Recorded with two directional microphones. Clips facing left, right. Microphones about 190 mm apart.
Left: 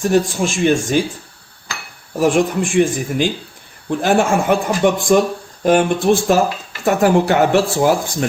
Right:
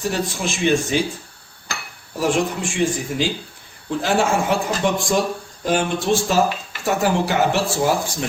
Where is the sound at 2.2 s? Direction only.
55° left (ahead or behind).